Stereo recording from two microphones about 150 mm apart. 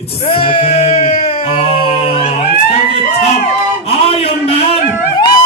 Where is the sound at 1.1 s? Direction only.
45° left (ahead or behind).